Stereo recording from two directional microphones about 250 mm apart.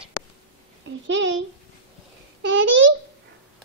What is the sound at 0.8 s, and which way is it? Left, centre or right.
Speech, right.